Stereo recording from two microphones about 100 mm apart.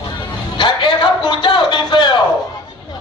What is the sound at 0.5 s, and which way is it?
Music, 55° left (ahead or behind).